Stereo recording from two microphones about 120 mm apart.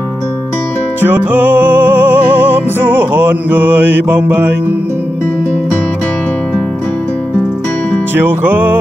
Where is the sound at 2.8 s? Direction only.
15° right (ahead or behind).